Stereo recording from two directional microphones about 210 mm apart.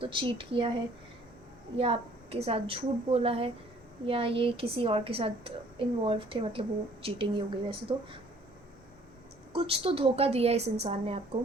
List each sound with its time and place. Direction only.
0.0 s a woman's voice: 25° right (ahead or behind)
1.7 s a woman's voice: 25° right (ahead or behind)
9.5 s a woman's voice: 25° right (ahead or behind)